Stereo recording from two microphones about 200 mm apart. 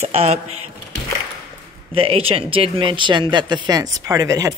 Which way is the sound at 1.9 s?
30° right (ahead or behind).